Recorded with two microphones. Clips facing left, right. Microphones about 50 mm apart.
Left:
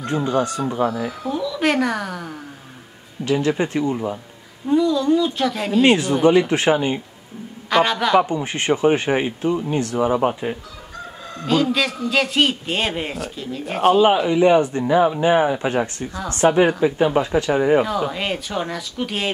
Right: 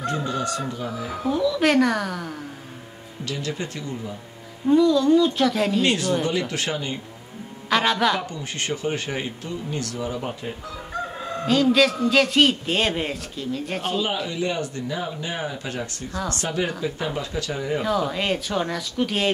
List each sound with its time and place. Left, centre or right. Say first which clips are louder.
0.0 s speech: left 5 dB; left
0.8 s speech: left 10 dB; left
1.2 s speech: right 2 dB; centre
3.3 s speech: left 10 dB; left
4.6 s speech: even; centre
5.8 s speech: left 6 dB; left
7.7 s speech: left 4 dB; centre
8.2 s speech: left 10 dB; left
11.4 s speech: right 1 dB; centre
14.0 s speech: left 11 dB; left
18.0 s speech: left 1 dB; centre